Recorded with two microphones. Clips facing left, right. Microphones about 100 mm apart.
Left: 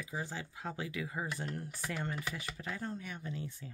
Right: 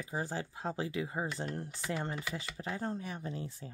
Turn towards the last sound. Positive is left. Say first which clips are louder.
# right 2 dB
turn(degrees=-35)  # may be behind; listen again after turning